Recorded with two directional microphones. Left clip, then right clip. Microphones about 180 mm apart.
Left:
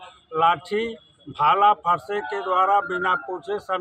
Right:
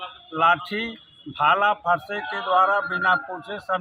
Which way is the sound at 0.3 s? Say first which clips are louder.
Even; 25° left (ahead or behind).